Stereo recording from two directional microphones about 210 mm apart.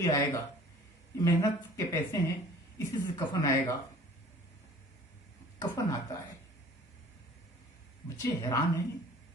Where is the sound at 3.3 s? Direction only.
15° left (ahead or behind).